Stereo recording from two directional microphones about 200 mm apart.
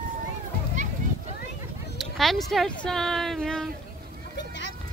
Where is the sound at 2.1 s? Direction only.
Centre (ahead or behind).